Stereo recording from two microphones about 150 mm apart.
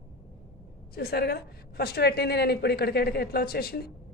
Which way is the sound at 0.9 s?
90° left.